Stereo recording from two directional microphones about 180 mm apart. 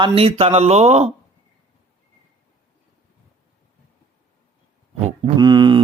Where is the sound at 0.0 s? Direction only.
30° right (ahead or behind).